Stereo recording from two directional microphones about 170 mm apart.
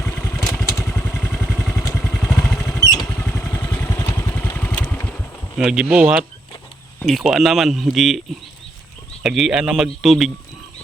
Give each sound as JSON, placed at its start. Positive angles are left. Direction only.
{"t": 0.5, "sound": "vehicle", "side_deg": 15}
{"t": 1.8, "sound": "vehicle", "side_deg": 20}
{"t": 2.0, "sound": "vehicle", "side_deg": 10}
{"t": 2.8, "sound": "vehicle", "side_deg": 20}
{"t": 5.5, "sound": "speech", "side_deg": -5}